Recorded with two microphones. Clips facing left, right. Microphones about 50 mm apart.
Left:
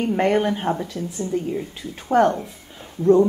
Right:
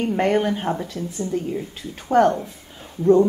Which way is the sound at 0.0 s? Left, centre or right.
Centre.